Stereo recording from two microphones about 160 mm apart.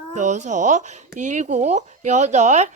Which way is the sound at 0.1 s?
50° right (ahead or behind).